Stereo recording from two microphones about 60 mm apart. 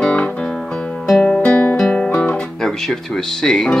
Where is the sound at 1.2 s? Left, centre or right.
Centre.